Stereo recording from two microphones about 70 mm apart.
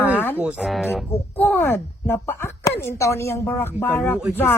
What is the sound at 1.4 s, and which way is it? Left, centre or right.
Speech, left.